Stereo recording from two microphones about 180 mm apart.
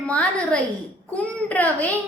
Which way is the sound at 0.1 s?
5° left (ahead or behind).